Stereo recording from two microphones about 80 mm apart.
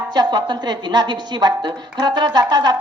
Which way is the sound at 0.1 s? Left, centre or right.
Right.